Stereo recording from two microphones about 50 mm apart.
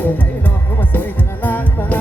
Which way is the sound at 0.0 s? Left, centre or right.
Left.